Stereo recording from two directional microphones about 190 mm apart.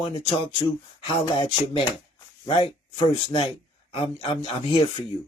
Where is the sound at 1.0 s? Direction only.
25° left (ahead or behind).